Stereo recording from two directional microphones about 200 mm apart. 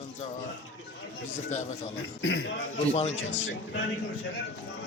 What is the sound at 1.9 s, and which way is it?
Speech, 65° left (ahead or behind).